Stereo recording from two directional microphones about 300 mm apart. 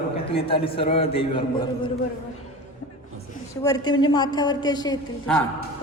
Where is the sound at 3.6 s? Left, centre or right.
Centre.